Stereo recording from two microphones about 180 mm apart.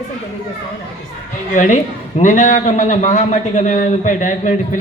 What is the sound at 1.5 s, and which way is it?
A man's voice, 45° left (ahead or behind).